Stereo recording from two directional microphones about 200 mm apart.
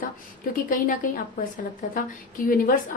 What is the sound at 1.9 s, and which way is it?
Speech, 45° left (ahead or behind).